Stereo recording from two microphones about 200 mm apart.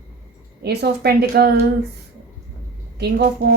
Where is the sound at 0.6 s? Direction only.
55° right (ahead or behind).